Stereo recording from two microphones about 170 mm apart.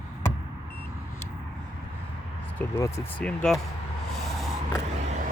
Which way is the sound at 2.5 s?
15° left (ahead or behind).